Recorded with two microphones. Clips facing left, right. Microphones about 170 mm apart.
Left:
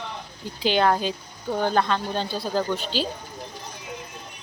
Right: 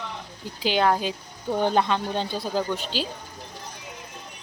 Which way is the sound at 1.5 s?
20° right (ahead or behind).